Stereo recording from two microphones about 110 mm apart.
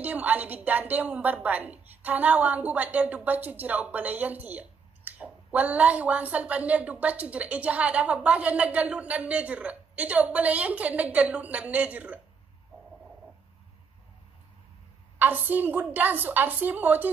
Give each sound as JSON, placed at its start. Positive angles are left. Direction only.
{"t": 0.0, "sound": "a woman's voice", "side_deg": -15}
{"t": 15.1, "sound": "a woman's voice", "side_deg": -15}